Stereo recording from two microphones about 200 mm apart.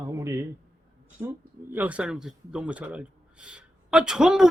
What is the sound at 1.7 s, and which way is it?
A man's voice, 5° right (ahead or behind).